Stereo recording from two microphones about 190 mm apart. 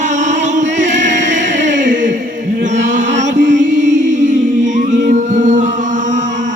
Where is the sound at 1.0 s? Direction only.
70° right (ahead or behind).